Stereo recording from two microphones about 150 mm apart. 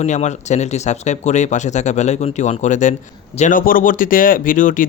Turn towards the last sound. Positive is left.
turn(degrees=60)  # may be behind; listen again after turning